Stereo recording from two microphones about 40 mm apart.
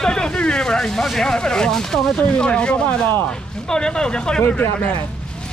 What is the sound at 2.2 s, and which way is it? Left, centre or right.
Speech, left.